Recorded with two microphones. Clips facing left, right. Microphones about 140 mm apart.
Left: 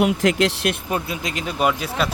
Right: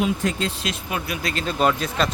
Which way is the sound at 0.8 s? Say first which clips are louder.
Left 2 dB; 30° left (ahead or behind).